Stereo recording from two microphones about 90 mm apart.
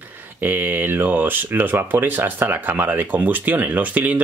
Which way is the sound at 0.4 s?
25° right (ahead or behind).